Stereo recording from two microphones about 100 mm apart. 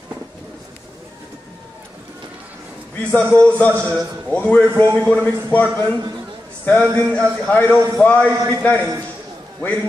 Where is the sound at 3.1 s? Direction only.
20° left (ahead or behind).